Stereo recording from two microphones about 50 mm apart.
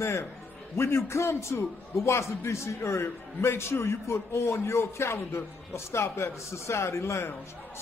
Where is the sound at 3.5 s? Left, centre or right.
Left.